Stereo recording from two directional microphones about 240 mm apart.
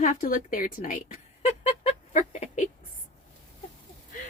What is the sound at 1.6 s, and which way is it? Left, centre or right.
Chicken, left.